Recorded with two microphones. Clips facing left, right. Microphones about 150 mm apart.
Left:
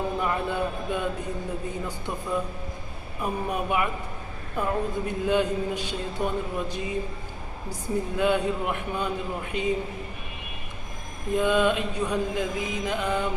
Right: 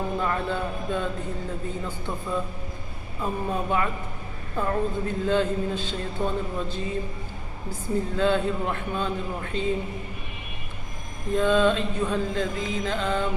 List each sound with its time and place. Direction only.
0.2 s speech: 15° left (ahead or behind)
3.2 s speech: 15° left (ahead or behind)
11.3 s speech: 15° left (ahead or behind)